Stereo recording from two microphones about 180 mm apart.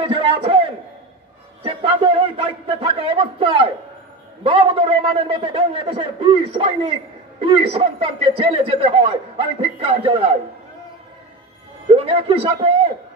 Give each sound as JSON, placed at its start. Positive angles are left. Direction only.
{"t": 0.0, "sound": "a sound", "side_deg": -30}
{"t": 1.6, "sound": "a man's voice", "side_deg": -30}
{"t": 11.9, "sound": "a man's voice", "side_deg": -30}